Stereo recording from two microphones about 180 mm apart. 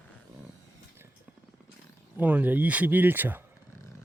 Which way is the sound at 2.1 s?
10° right (ahead or behind).